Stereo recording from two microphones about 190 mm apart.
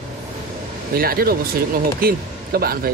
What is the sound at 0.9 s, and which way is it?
A man's voice, 50° right (ahead or behind).